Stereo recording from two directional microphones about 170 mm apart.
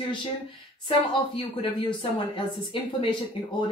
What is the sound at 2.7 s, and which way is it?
Speech, 30° left (ahead or behind).